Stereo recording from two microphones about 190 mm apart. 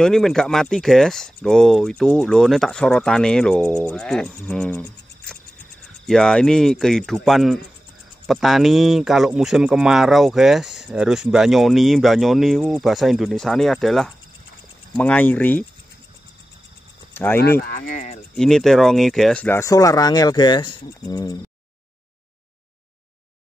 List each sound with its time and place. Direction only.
0.0 s a man's voice: 5° left (ahead or behind)
3.7 s cricket: 5° left (ahead or behind)
6.0 s a man's voice: 5° left (ahead or behind)
17.1 s speech: 10° left (ahead or behind)
17.4 s speech: 55° left (ahead or behind); by 18.2 s 40° left (ahead or behind)
18.3 s speech: centre (ahead or behind); by 21.4 s 20° left (ahead or behind)